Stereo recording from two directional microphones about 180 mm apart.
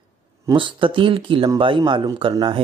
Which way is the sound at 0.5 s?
25° right (ahead or behind).